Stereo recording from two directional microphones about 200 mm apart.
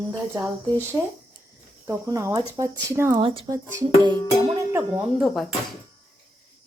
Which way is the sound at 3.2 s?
25° right (ahead or behind).